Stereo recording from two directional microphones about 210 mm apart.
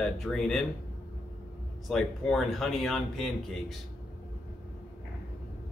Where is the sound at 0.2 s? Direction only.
Centre (ahead or behind).